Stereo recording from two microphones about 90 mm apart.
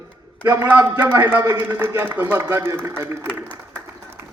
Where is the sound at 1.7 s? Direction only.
25° right (ahead or behind).